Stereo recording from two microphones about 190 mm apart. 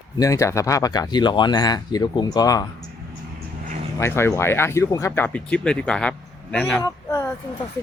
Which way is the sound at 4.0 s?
15° left (ahead or behind).